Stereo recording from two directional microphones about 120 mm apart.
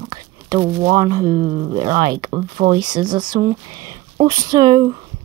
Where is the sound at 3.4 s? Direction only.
25° right (ahead or behind).